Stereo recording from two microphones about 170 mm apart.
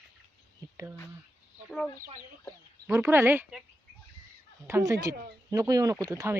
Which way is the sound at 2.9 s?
15° right (ahead or behind).